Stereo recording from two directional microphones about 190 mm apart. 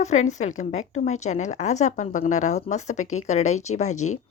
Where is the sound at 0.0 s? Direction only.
35° left (ahead or behind).